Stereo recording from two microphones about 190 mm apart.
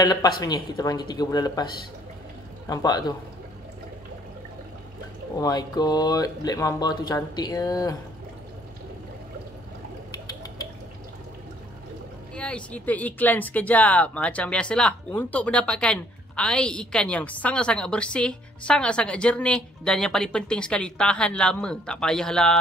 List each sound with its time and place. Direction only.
0.0 s speech: 20° left (ahead or behind)
2.7 s speech: 20° left (ahead or behind)
5.4 s speech: 20° left (ahead or behind)
12.4 s speech: 5° left (ahead or behind)